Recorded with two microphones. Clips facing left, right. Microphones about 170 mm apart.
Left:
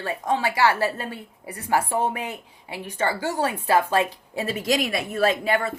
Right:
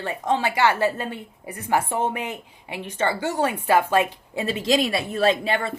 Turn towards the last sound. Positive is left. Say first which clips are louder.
# right 1 dB
turn(degrees=-25)  # may be behind; listen again after turning